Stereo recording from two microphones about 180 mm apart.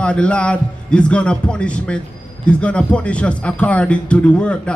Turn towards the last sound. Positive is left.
turn(degrees=5)  # may be behind; listen again after turning